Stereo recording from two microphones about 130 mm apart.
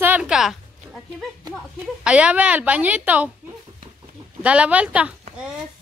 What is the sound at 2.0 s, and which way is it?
A woman's voice, 10° right (ahead or behind).